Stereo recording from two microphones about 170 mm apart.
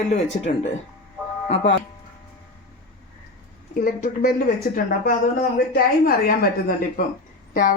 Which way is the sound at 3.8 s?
50° left (ahead or behind).